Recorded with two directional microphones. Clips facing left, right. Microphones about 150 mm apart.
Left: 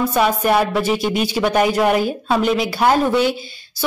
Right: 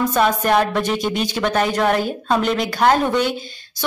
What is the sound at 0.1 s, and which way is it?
A woman's voice, 10° left (ahead or behind).